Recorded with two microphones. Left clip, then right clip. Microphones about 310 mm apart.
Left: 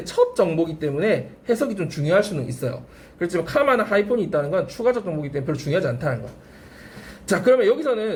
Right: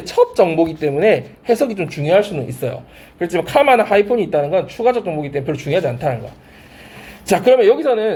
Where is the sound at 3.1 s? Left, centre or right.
Centre.